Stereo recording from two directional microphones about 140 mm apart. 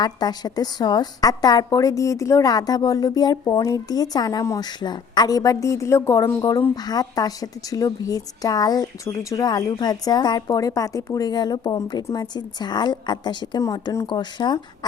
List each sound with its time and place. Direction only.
0.0 s speech: 30° left (ahead or behind)